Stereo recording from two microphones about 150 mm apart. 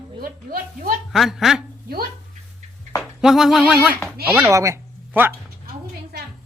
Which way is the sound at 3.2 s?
5° right (ahead or behind).